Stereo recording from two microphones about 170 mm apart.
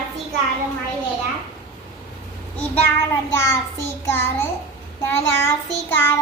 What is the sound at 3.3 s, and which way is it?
A child's voice, 15° left (ahead or behind).